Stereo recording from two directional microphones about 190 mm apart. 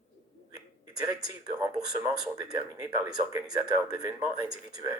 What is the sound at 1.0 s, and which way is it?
Speech, 20° right (ahead or behind).